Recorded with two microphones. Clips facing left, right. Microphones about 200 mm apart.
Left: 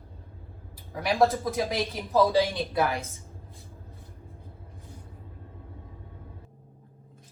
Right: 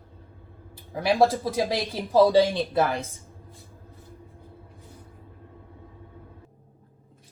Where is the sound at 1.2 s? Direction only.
30° right (ahead or behind).